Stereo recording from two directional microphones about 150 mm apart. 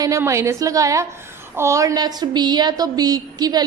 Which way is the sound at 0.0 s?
20° right (ahead or behind).